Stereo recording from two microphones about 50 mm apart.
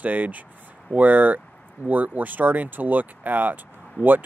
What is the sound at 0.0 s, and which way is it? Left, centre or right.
Speech, right.